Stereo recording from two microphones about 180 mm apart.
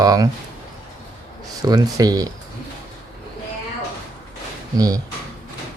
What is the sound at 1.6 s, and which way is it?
Speech, 20° right (ahead or behind).